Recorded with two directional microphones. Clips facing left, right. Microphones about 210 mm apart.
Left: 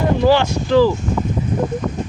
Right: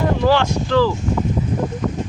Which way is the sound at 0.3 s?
10° left (ahead or behind).